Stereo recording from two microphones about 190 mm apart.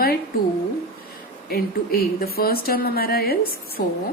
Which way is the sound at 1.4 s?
55° left (ahead or behind).